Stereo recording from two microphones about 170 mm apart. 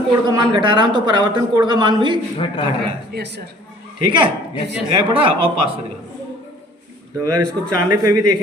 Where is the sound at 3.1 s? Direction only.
75° right (ahead or behind).